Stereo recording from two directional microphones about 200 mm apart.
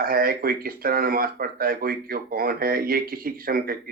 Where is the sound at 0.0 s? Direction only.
45° right (ahead or behind).